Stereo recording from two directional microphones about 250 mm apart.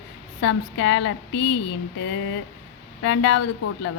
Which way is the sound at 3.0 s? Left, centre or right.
Left.